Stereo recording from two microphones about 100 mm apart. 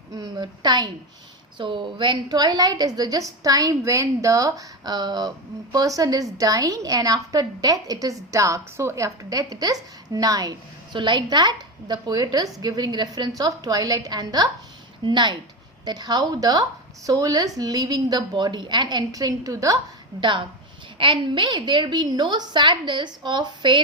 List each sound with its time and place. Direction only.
0.1 s a woman's voice: 40° right (ahead or behind)
1.5 s a woman's voice: 55° right (ahead or behind); by 19.8 s 35° right (ahead or behind)
21.0 s a woman's voice: 55° right (ahead or behind)